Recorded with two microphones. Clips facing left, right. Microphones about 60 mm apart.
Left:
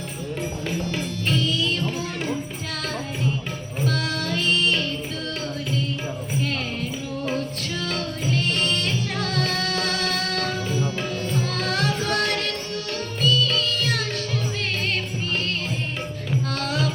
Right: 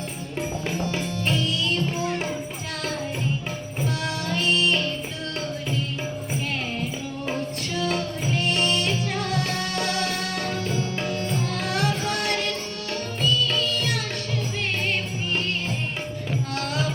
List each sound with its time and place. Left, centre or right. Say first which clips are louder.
1.3 s music: left 2 dB; centre
3.8 s music: left 3 dB; centre
7.8 s music: right 3 dB; centre
11.6 s music: even; centre
16.6 s music: left 1 dB; centre